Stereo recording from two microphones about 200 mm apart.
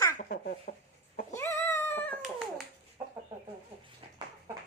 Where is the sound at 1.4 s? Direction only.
10° left (ahead or behind).